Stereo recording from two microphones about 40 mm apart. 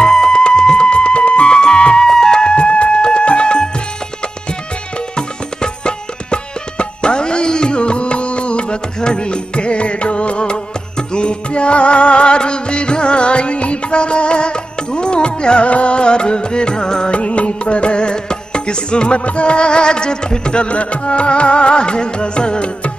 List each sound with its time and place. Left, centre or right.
0.0 s music: centre
2.0 s music: centre
5.1 s music: left
17.1 s music: left